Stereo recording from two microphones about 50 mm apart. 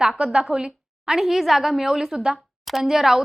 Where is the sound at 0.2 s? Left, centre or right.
Centre.